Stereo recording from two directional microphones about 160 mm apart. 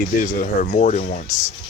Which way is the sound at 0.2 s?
55° left (ahead or behind).